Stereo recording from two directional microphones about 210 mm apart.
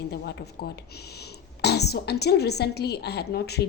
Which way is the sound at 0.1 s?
50° left (ahead or behind).